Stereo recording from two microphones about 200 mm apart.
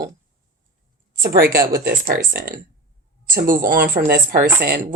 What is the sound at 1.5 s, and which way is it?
Speech, 50° right (ahead or behind).